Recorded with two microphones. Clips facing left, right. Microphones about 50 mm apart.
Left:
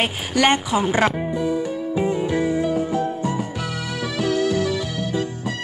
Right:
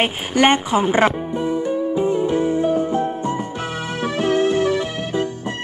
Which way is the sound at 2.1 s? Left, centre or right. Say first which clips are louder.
Right 2 dB; right.